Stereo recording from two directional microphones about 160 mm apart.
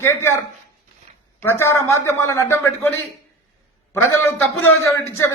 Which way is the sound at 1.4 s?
15° left (ahead or behind).